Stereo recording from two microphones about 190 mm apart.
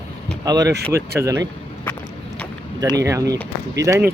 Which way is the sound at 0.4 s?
20° right (ahead or behind).